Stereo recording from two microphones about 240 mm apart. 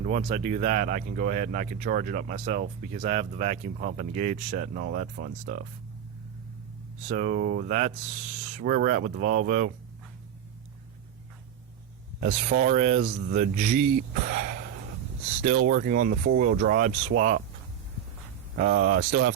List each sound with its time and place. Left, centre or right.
0.0 s speech: right
7.1 s speech: right
12.2 s speech: right
18.6 s speech: right